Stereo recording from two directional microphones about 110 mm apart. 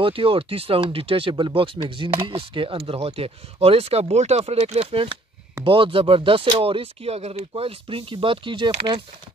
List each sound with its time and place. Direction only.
0.0 s speech: 55° right (ahead or behind)